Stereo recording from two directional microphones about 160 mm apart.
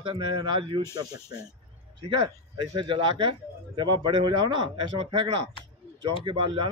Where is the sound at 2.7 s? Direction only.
30° right (ahead or behind).